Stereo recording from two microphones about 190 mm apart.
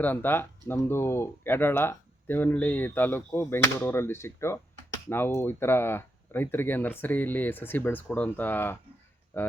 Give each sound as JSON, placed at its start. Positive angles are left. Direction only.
{"t": 0.0, "sound": "speech", "side_deg": 10}